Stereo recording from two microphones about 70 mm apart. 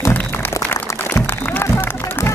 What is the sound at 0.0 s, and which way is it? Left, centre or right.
Music, left.